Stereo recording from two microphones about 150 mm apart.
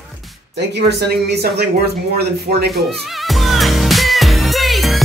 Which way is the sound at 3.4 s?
Centre (ahead or behind).